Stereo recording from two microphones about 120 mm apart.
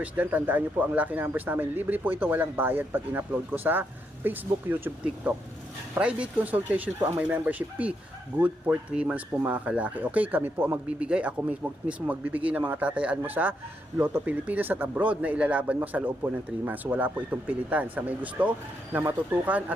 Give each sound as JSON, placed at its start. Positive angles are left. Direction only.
{"t": 0.0, "sound": "speech", "side_deg": -15}